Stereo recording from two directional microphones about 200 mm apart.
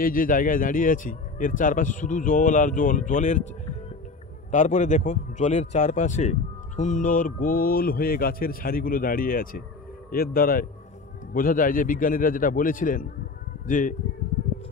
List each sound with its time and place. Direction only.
0.0 s speech: 45° left (ahead or behind)
4.5 s speech: 40° left (ahead or behind)